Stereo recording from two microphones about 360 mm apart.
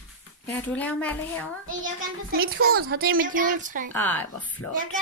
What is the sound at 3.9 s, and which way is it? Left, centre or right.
Speech, centre.